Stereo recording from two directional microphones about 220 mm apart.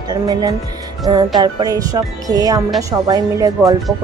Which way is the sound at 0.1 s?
20° right (ahead or behind).